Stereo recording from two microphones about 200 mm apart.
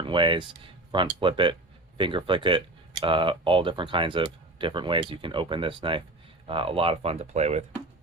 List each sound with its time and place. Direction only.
0.0 s speech: 25° right (ahead or behind)